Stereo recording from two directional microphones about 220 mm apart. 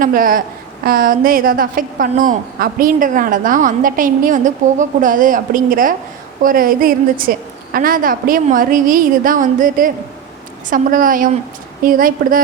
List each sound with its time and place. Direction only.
0.0 s a woman's voice: 40° right (ahead or behind)